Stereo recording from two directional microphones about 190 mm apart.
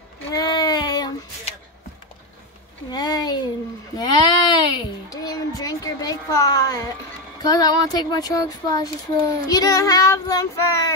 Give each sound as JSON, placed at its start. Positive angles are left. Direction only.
{"t": 0.3, "sound": "child singing", "side_deg": 20}
{"t": 2.9, "sound": "a sound", "side_deg": 20}
{"t": 7.4, "sound": "speech", "side_deg": 20}